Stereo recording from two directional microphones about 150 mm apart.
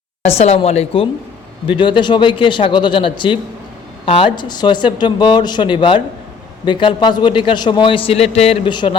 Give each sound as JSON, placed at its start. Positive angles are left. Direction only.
{"t": 0.3, "sound": "speech", "side_deg": 45}
{"t": 1.6, "sound": "a man's voice", "side_deg": 35}